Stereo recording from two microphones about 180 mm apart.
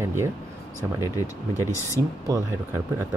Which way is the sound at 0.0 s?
15° right (ahead or behind).